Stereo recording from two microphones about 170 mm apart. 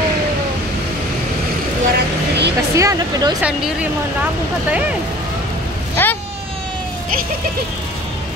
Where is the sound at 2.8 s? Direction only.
20° right (ahead or behind).